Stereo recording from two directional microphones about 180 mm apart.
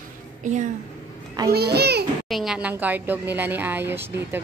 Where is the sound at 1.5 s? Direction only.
65° right (ahead or behind).